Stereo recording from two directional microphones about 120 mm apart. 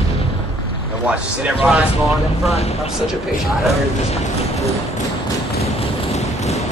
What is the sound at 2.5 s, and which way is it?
Speech, 60° left (ahead or behind).